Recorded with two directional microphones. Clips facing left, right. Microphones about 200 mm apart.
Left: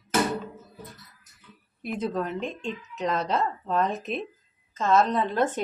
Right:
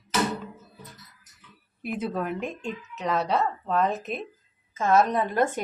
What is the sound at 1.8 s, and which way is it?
A woman's voice, 5° right (ahead or behind).